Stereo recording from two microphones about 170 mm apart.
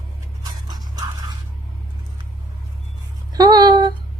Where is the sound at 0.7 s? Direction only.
25° right (ahead or behind).